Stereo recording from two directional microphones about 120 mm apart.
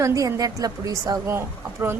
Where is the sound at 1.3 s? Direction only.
20° right (ahead or behind).